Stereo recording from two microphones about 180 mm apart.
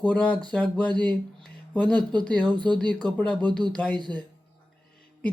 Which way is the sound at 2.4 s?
25° right (ahead or behind).